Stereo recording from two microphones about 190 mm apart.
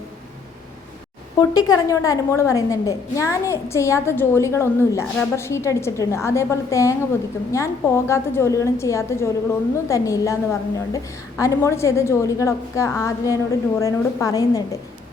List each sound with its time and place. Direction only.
1.4 s a woman's voice: 20° left (ahead or behind)